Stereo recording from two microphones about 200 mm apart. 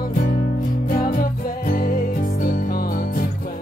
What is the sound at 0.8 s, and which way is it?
Music, 45° left (ahead or behind).